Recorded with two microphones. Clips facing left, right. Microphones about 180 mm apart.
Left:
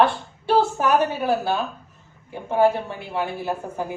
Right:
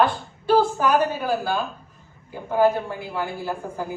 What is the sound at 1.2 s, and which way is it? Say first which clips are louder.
Speech: left 2 dB; 25° left (ahead or behind).